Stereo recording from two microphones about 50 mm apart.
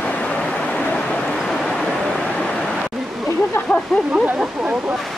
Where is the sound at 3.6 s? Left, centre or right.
Left.